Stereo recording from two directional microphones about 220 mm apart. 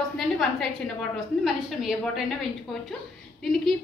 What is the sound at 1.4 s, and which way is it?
Speech, centre (ahead or behind).